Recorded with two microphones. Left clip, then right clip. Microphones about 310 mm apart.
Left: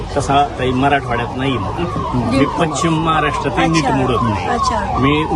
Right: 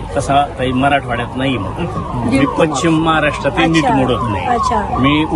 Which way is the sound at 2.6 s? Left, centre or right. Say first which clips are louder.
Right 3 dB; centre.